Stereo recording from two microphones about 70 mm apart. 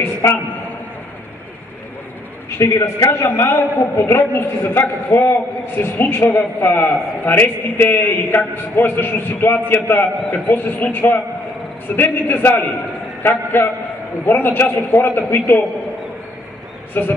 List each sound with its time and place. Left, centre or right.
0.0 s a sound: left
2.5 s a man's voice: left
17.0 s a man's voice: left